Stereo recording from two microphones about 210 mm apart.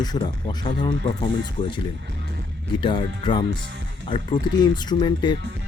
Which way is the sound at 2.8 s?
25° left (ahead or behind).